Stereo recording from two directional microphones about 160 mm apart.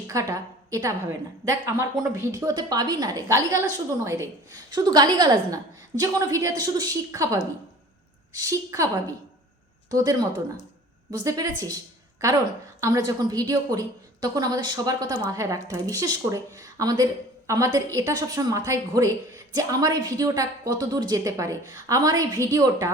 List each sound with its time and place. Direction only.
0.1 s a woman's voice: 20° right (ahead or behind)
8.4 s a woman's voice: 20° right (ahead or behind)
9.9 s a woman's voice: 25° right (ahead or behind)
12.8 s a woman's voice: 20° right (ahead or behind)